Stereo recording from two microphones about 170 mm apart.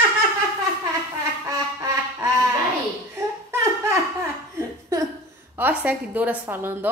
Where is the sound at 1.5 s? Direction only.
20° right (ahead or behind).